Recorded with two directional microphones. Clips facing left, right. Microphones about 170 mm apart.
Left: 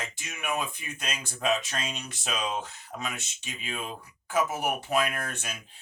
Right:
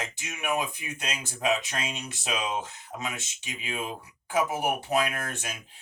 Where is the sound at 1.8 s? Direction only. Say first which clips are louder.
Right 1 dB; 10° right (ahead or behind).